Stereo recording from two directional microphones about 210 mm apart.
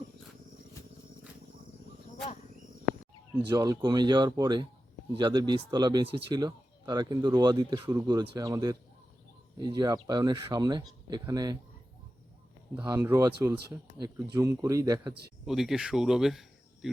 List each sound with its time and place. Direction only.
3.5 s speech: 15° right (ahead or behind)
12.9 s speech: 15° right (ahead or behind)
15.4 s speech: centre (ahead or behind)